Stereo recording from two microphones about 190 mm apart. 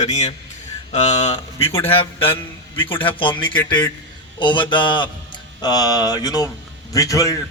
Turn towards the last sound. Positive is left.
turn(degrees=15)  # may be behind; listen again after turning